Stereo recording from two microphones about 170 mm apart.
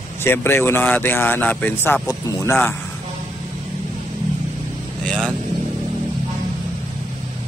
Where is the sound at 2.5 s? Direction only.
10° left (ahead or behind).